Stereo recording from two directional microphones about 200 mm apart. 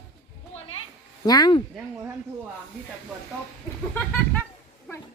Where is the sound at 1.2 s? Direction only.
20° left (ahead or behind).